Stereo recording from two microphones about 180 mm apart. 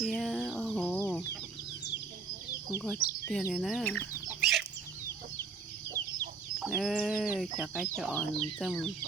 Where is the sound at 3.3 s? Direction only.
Centre (ahead or behind).